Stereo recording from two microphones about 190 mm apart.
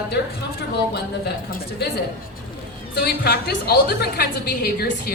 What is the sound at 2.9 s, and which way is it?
A woman's voice, 60° left (ahead or behind).